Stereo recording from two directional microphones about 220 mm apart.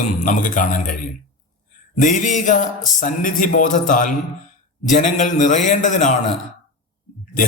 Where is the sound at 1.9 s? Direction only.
35° left (ahead or behind).